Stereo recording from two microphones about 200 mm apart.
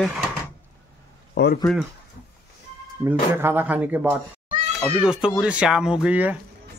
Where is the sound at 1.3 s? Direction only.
60° left (ahead or behind).